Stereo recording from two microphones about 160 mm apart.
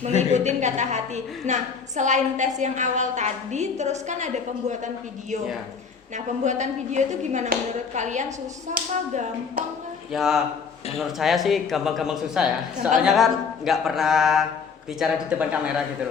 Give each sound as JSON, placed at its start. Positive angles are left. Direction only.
{"t": 0.2, "sound": "a woman's voice", "side_deg": -45}
{"t": 6.1, "sound": "a woman's voice", "side_deg": -50}
{"t": 10.1, "sound": "speech", "side_deg": -5}